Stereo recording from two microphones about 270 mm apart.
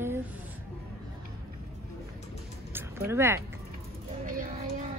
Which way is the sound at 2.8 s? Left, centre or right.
Centre.